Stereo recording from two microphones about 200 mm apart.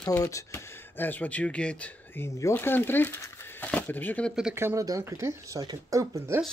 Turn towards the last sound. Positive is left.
turn(degrees=-15)  # may be behind; listen again after turning